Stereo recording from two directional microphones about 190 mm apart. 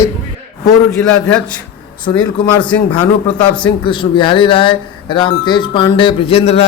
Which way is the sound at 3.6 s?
25° left (ahead or behind).